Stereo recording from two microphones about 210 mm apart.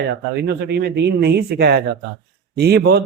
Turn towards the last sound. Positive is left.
turn(degrees=-50)  # may be behind; listen again after turning